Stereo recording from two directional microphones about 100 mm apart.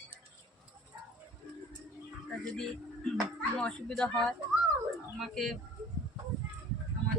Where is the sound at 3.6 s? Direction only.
10° left (ahead or behind).